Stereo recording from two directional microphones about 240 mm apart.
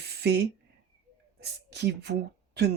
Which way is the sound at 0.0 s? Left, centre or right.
Right.